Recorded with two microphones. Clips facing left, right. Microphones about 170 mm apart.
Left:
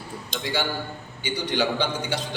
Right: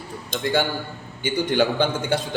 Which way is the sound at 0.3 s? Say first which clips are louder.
Right 5 dB; 50° right (ahead or behind).